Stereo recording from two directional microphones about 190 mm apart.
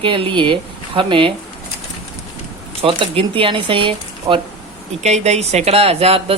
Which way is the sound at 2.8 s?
30° right (ahead or behind).